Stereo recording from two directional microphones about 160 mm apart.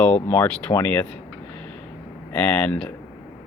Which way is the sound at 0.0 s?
10° left (ahead or behind).